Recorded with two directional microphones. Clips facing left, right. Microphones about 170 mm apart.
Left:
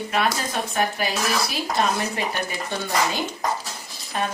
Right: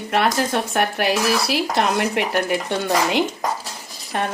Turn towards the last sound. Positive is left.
turn(degrees=-65)  # may be behind; listen again after turning